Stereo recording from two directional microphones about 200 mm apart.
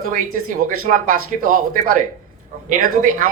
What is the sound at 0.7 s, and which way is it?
A woman's voice, 45° right (ahead or behind).